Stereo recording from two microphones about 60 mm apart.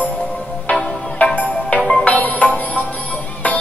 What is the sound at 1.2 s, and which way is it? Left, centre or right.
Music, left.